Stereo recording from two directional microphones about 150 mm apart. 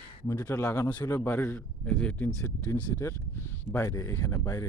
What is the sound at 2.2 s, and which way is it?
Speech, 20° left (ahead or behind).